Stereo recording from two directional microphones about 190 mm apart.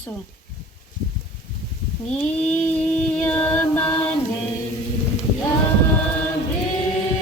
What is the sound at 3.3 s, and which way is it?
Speech, 10° left (ahead or behind).